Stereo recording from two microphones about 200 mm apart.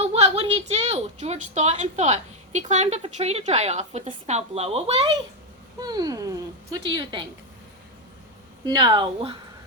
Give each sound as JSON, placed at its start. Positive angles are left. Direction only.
{"t": 0.0, "sound": "a woman's voice", "side_deg": -30}
{"t": 5.8, "sound": "speech", "side_deg": -20}
{"t": 8.6, "sound": "speech", "side_deg": -20}